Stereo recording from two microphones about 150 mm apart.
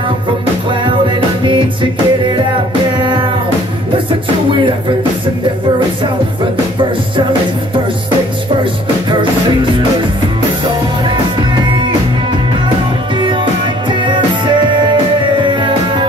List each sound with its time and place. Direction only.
1.4 s music: 35° right (ahead or behind)
13.2 s music: 35° right (ahead or behind)